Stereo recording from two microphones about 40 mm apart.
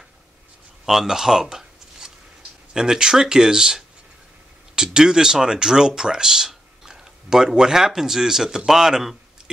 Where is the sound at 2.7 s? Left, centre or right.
Centre.